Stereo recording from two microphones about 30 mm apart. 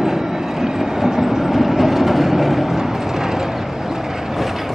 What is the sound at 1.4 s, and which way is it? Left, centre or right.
Vehicle, centre.